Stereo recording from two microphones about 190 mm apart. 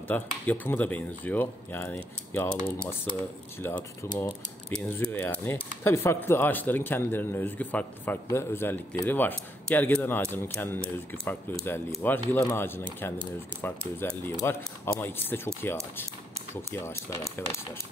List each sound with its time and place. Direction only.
0.1 s speech: 10° left (ahead or behind)